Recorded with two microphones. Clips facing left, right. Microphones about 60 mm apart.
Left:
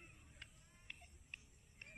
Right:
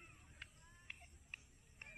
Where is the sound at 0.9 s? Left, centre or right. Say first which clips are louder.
Right 1 dB; centre.